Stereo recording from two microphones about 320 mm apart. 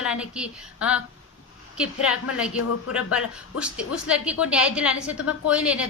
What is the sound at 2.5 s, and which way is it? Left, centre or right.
Speech, left.